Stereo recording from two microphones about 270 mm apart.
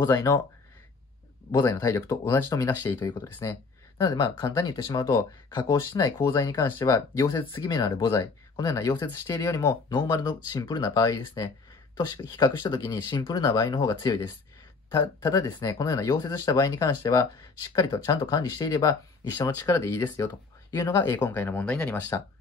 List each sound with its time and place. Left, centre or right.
0.0 s speech: centre
1.5 s speech: centre